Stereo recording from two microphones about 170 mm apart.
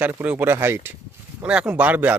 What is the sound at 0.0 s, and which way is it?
Speech, 10° right (ahead or behind).